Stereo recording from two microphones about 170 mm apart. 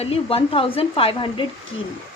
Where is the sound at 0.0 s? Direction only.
35° left (ahead or behind).